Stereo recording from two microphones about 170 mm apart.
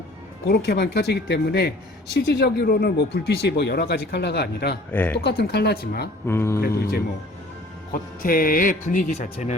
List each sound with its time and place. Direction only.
0.4 s speech: 65° left (ahead or behind)
4.9 s speech: 10° left (ahead or behind)
5.2 s speech: 75° left (ahead or behind)
6.2 s speech: 15° left (ahead or behind)
8.2 s speech: 55° left (ahead or behind)